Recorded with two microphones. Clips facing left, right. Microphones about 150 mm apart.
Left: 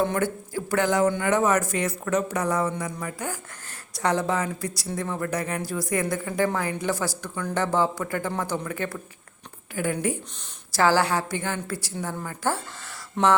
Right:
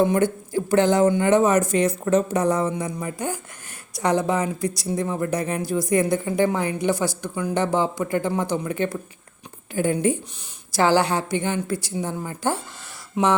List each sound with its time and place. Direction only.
0.0 s speech: 20° right (ahead or behind)
13.2 s speech: 5° right (ahead or behind)